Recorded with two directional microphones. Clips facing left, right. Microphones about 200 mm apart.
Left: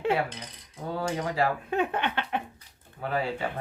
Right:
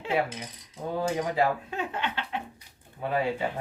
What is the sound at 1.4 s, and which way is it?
Speech, 20° right (ahead or behind).